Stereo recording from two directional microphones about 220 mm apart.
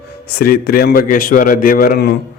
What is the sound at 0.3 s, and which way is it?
A man's voice, 45° left (ahead or behind).